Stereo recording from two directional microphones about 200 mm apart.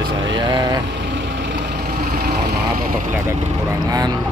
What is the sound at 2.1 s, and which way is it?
Vehicle, 50° right (ahead or behind).